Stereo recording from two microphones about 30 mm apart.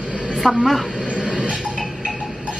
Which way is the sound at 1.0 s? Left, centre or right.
Right.